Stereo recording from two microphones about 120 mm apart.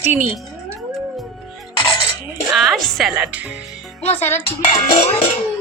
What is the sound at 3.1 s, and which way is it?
Speech, 10° right (ahead or behind).